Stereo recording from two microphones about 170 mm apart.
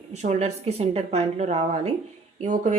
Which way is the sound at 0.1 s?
45° right (ahead or behind).